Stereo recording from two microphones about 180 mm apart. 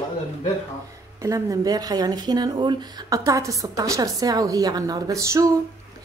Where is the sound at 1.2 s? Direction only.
15° right (ahead or behind).